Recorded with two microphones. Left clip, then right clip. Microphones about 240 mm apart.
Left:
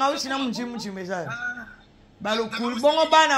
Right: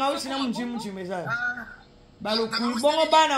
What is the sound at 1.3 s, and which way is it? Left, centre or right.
Speech, centre.